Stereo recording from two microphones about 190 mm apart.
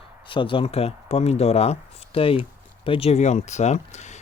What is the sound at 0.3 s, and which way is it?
Speech, 25° left (ahead or behind).